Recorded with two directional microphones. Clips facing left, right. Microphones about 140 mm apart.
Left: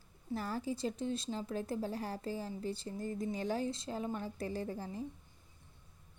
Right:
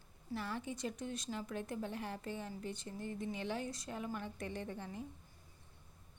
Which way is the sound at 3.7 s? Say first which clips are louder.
Left 5 dB; 25° left (ahead or behind).